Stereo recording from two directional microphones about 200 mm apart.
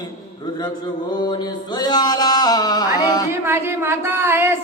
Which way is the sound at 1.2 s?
20° left (ahead or behind).